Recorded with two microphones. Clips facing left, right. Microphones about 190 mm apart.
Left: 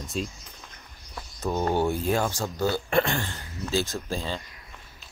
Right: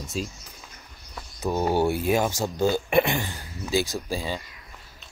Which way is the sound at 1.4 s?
10° right (ahead or behind).